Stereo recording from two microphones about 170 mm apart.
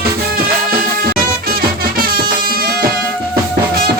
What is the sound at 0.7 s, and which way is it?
Music, 60° right (ahead or behind).